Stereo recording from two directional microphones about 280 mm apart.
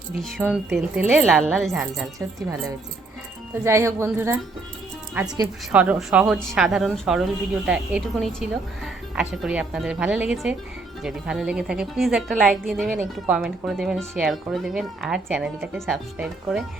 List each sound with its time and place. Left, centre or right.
0.2 s a woman's voice: centre